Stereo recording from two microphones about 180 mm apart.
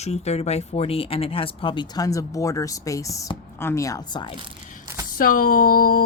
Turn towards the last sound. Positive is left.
turn(degrees=55)  # may be behind; listen again after turning